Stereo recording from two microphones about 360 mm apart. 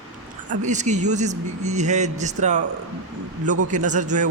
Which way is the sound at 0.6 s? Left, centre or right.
Centre.